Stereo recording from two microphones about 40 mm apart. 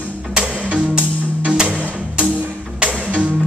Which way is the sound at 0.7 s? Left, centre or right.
Right.